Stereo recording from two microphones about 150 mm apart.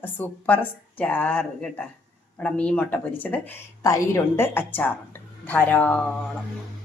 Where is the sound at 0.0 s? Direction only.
10° left (ahead or behind).